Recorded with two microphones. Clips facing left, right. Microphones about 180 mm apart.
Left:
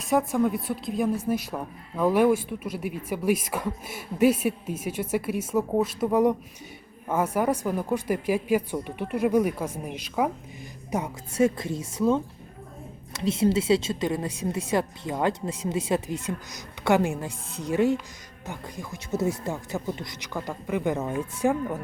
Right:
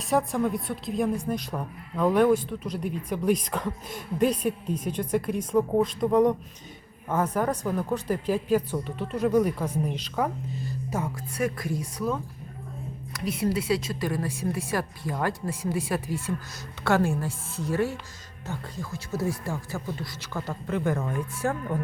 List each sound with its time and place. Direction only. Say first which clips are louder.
0.0 s a woman's voice: left 2 dB; centre (ahead or behind)